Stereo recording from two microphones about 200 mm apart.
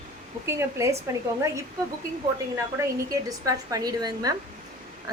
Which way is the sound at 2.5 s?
15° right (ahead or behind).